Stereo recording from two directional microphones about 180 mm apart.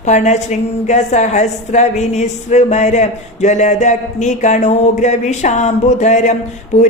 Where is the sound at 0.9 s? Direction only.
40° left (ahead or behind).